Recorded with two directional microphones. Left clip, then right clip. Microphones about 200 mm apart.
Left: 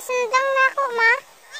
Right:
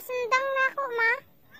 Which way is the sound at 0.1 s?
15° right (ahead or behind).